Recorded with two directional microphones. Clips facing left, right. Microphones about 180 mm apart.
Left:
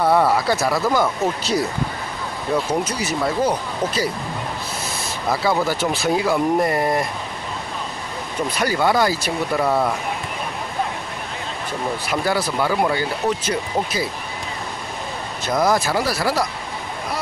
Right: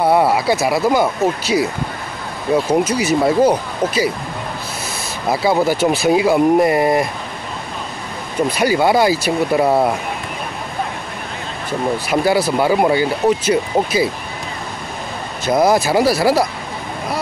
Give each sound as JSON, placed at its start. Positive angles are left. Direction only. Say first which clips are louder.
{"t": 0.0, "sound": "speech", "louder": "right 3 dB", "side_deg": -10}
{"t": 5.3, "sound": "speech", "louder": "right 5 dB", "side_deg": -15}
{"t": 8.5, "sound": "speech", "louder": "right 4 dB", "side_deg": -10}
{"t": 9.7, "sound": "speech", "louder": "right 5 dB", "side_deg": -25}
{"t": 12.1, "sound": "speech", "louder": "right 6 dB", "side_deg": -10}
{"t": 15.7, "sound": "speech", "louder": "right 6 dB", "side_deg": -10}